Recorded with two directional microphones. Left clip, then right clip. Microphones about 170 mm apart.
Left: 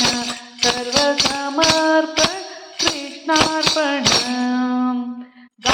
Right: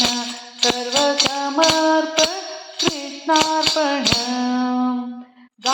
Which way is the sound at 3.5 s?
30° left (ahead or behind).